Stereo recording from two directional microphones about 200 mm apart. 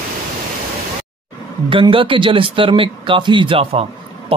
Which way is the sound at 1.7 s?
25° right (ahead or behind).